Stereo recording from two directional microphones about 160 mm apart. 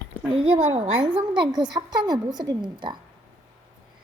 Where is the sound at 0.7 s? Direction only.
25° right (ahead or behind).